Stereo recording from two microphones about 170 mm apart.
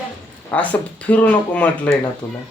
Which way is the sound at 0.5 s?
10° left (ahead or behind).